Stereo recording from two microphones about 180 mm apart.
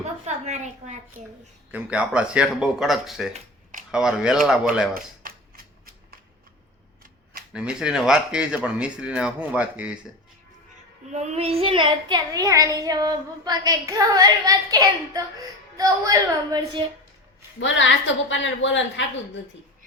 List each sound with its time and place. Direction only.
0.0 s a sound: 40° right (ahead or behind)
1.7 s speech: 5° right (ahead or behind)
5.2 s shuffling cards: 50° right (ahead or behind)
7.5 s speech: 5° right (ahead or behind)
11.1 s a child's voice: 40° right (ahead or behind); by 16.8 s 20° right (ahead or behind)
17.6 s a woman's voice: 90° left